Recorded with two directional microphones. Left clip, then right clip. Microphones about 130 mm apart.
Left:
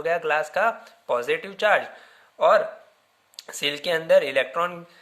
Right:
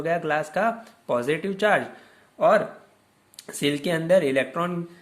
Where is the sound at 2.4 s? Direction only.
30° left (ahead or behind).